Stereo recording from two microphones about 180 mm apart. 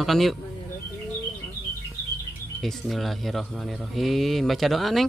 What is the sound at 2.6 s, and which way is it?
Speech, centre (ahead or behind).